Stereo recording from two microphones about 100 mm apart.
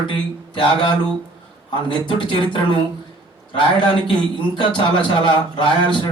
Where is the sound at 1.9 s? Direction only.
55° left (ahead or behind).